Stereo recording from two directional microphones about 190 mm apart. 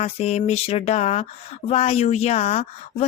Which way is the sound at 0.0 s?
35° left (ahead or behind).